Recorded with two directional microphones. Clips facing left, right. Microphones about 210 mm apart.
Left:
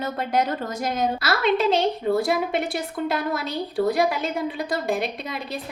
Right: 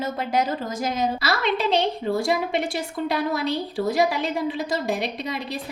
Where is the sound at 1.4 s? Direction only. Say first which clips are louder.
Left 3 dB; 50° left (ahead or behind).